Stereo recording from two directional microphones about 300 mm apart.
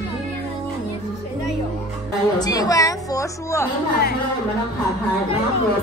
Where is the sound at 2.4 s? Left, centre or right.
Centre.